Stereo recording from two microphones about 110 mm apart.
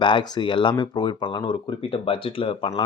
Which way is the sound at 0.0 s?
45° left (ahead or behind).